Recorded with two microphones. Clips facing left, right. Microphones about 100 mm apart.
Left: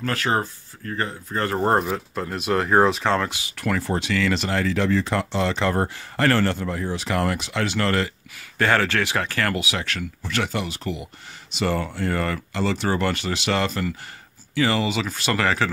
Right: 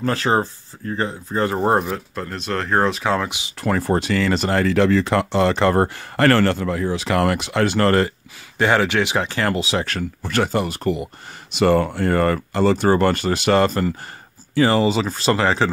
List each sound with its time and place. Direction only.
0.0 s speech: 25° right (ahead or behind); by 3.3 s 5° right (ahead or behind)
3.3 s speech: 20° right (ahead or behind)
3.5 s speech: 30° right (ahead or behind)
3.8 s speech: 45° right (ahead or behind)
8.5 s speech: 15° right (ahead or behind)